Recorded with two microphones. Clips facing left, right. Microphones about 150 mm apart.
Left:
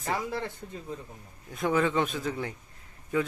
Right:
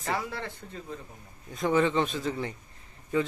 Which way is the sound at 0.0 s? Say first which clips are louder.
Left 1 dB; 15° left (ahead or behind).